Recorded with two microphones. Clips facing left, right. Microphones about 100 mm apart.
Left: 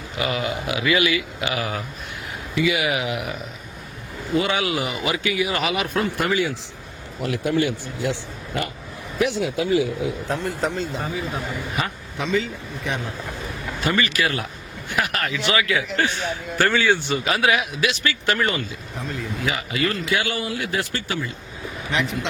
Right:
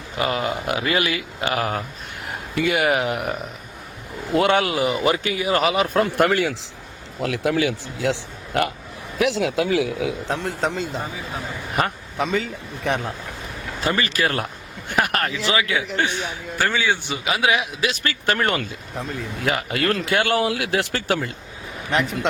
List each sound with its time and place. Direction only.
0.2 s speech: 40° right (ahead or behind)
4.4 s speech: 60° right (ahead or behind)
4.6 s speech: 30° right (ahead or behind)
6.1 s speech: 65° right (ahead or behind)
7.2 s a man's voice: 90° right
9.1 s a man's voice: 90° right
11.8 s speech: 45° right (ahead or behind)
13.8 s speech: 35° right (ahead or behind)
15.0 s speech: 50° right (ahead or behind)
15.3 s a man's voice: 30° right (ahead or behind); by 20.3 s 60° right (ahead or behind)
20.3 s speech: 90° right
21.9 s speech: 45° right (ahead or behind)